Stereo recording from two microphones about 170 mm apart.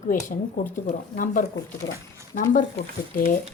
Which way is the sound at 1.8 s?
20° left (ahead or behind).